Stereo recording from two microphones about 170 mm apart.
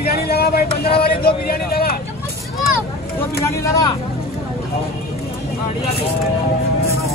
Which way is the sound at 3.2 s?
15° left (ahead or behind).